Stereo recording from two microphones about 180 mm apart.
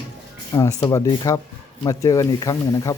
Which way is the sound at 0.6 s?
20° left (ahead or behind).